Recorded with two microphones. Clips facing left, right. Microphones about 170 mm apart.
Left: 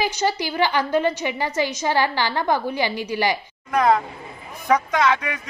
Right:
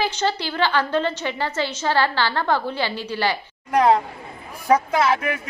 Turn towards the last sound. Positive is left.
turn(degrees=-30)  # may be behind; listen again after turning